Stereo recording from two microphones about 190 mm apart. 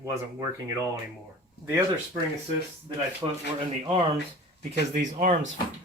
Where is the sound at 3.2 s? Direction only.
20° right (ahead or behind).